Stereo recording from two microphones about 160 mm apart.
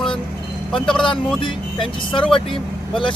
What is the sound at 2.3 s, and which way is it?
Speech, 30° left (ahead or behind).